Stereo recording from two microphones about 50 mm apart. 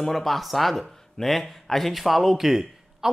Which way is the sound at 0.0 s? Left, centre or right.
Centre.